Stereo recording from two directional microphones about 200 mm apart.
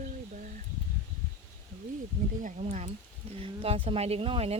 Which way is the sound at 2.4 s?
35° right (ahead or behind).